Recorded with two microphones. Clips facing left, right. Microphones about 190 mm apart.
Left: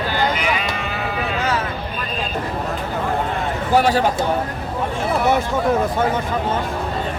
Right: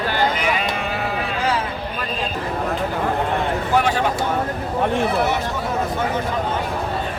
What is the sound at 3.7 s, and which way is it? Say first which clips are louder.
Speech: left 4 dB; 35° left (ahead or behind).